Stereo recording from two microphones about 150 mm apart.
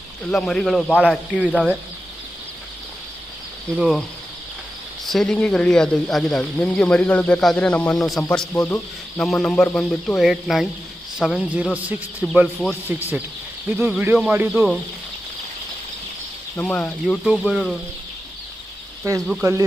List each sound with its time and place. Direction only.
0.3 s speech: 5° left (ahead or behind)
3.7 s speech: centre (ahead or behind)
5.0 s a man's voice: centre (ahead or behind)
16.5 s speech: 10° left (ahead or behind)
17.2 s speech: 5° right (ahead or behind)
19.1 s speech: 25° right (ahead or behind)